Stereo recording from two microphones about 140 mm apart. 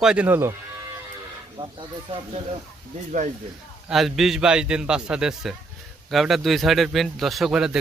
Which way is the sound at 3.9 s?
Centre (ahead or behind).